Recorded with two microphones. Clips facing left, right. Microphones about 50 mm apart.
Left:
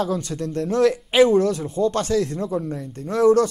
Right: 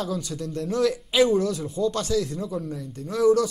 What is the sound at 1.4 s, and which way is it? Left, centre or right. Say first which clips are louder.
Speech: left 5 dB; left.